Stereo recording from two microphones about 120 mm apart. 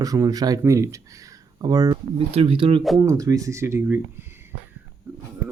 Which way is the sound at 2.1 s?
50° right (ahead or behind).